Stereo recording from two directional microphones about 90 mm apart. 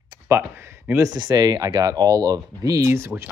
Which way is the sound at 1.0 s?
50° right (ahead or behind).